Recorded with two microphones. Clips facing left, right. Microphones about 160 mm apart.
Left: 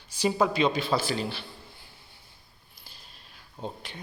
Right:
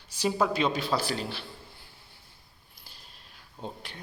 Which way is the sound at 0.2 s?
5° left (ahead or behind).